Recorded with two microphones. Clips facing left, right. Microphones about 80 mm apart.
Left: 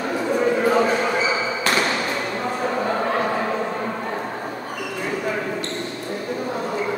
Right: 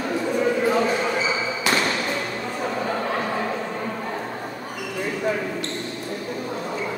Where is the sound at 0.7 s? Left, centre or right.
Centre.